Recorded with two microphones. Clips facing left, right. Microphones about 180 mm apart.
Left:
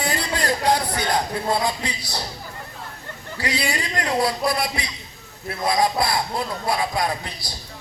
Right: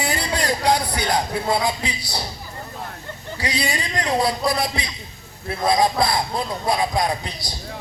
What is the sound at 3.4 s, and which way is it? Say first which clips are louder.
Speech: even; 20° right (ahead or behind).